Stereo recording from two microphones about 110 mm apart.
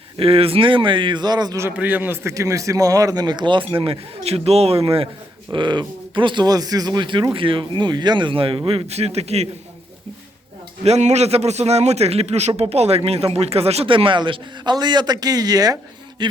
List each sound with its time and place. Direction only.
0.2 s speech: 60° right (ahead or behind); by 1.5 s 40° right (ahead or behind)
1.7 s a man's voice: 15° right (ahead or behind)
2.3 s speech: 30° right (ahead or behind); by 5.0 s 60° right (ahead or behind)
5.5 s speech: 45° right (ahead or behind); by 9.5 s 75° right (ahead or behind)
10.8 s a man's voice: 80° right
13.9 s speech: 50° right (ahead or behind)